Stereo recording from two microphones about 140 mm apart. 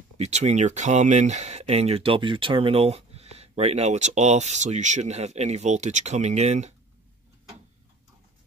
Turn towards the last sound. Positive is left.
turn(degrees=-50)  # may be behind; listen again after turning